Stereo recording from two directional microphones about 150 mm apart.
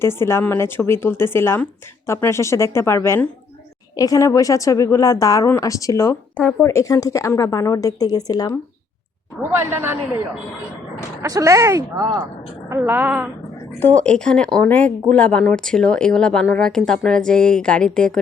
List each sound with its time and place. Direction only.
0.0 s a woman's voice: 15° left (ahead or behind)
9.6 s a woman's voice: 15° right (ahead or behind)
11.2 s a woman's voice: 20° right (ahead or behind)
13.7 s speech: 10° left (ahead or behind)